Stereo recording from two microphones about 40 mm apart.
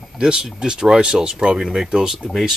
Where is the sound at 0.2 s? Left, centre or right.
Centre.